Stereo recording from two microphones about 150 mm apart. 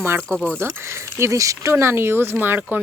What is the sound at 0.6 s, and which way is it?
Speech, 15° right (ahead or behind).